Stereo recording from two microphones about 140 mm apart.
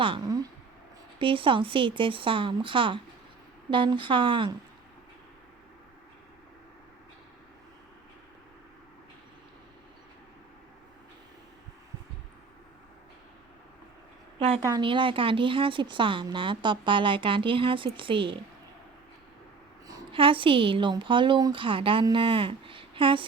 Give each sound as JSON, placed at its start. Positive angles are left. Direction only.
{"t": 1.2, "sound": "speech", "side_deg": -40}
{"t": 14.3, "sound": "a sound", "side_deg": -45}
{"t": 14.6, "sound": "speech", "side_deg": -30}
{"t": 20.1, "sound": "speech", "side_deg": -40}